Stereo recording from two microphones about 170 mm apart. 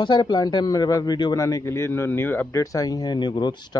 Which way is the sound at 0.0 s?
25° left (ahead or behind).